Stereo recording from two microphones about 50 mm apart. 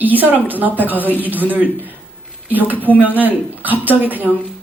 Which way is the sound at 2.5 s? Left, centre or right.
Right.